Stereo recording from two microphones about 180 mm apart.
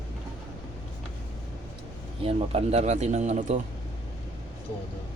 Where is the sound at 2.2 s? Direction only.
35° right (ahead or behind).